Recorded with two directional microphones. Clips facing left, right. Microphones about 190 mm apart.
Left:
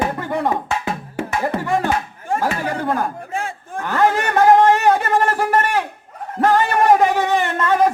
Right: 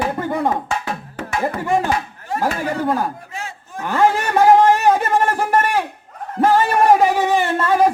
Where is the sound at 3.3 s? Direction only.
50° left (ahead or behind).